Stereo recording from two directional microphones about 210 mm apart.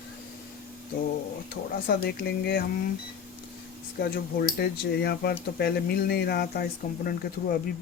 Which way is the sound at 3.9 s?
45° left (ahead or behind).